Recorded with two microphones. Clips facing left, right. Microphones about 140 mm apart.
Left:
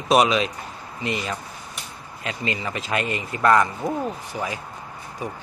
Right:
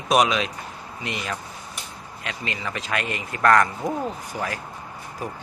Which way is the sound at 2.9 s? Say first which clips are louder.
Left 3 dB; 40° left (ahead or behind).